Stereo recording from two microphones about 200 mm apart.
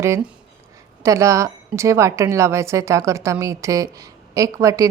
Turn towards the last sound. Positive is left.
turn(degrees=-15)  # may be behind; listen again after turning